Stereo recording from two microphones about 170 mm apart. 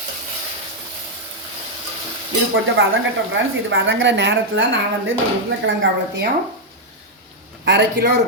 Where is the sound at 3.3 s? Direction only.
90° right.